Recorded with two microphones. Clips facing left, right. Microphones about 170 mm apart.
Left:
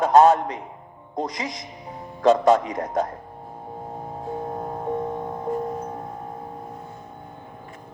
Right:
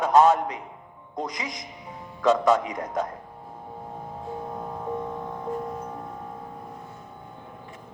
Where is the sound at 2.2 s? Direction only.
40° left (ahead or behind).